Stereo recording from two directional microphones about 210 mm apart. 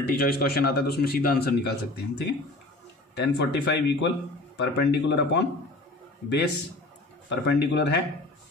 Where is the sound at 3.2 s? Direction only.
55° left (ahead or behind).